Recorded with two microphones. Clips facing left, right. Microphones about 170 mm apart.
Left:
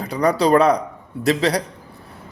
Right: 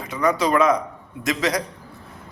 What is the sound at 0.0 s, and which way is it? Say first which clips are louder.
A man's voice: left 3 dB; 35° left (ahead or behind).